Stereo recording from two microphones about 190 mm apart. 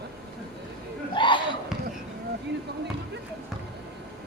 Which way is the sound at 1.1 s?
25° left (ahead or behind).